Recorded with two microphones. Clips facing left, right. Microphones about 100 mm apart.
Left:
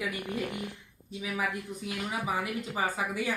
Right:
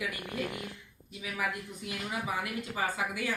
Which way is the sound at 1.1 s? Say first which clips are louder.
Left 2 dB; 25° left (ahead or behind).